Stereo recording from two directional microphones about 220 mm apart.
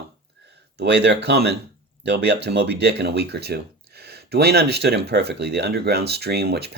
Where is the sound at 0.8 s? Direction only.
50° right (ahead or behind).